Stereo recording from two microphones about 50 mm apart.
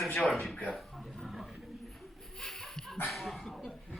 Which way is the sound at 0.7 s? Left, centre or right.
Centre.